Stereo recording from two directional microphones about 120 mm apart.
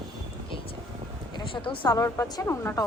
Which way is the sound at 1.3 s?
45° left (ahead or behind).